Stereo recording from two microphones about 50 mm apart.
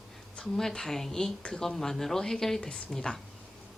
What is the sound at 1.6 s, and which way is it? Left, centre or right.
Speech, centre.